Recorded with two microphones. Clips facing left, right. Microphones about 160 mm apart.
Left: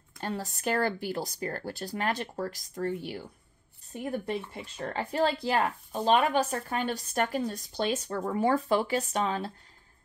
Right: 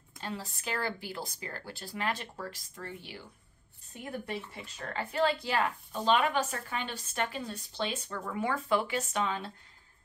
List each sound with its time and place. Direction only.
0.2 s speech: 50° left (ahead or behind)
4.6 s speech: 40° left (ahead or behind)